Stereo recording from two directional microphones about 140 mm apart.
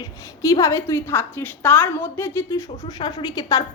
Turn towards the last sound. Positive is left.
turn(degrees=25)  # may be behind; listen again after turning